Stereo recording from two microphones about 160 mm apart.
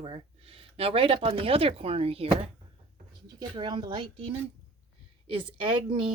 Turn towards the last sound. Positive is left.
turn(degrees=-30)  # may be behind; listen again after turning